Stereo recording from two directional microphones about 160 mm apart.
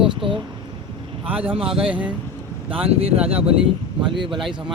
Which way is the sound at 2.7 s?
35° right (ahead or behind).